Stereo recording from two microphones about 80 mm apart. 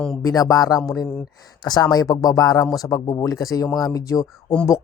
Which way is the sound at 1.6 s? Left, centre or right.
Left.